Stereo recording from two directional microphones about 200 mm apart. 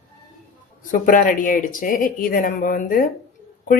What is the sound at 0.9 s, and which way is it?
Speech, 45° left (ahead or behind).